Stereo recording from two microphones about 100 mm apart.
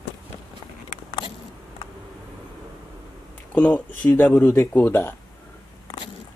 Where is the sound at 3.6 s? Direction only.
15° left (ahead or behind).